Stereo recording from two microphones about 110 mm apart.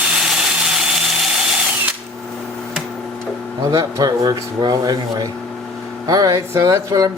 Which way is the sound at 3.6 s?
30° right (ahead or behind).